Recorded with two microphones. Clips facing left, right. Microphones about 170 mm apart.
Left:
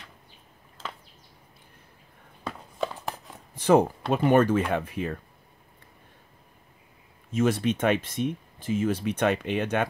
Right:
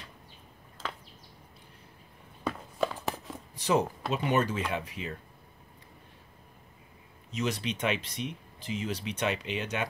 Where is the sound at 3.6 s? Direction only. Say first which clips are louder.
Left 7 dB; 55° left (ahead or behind).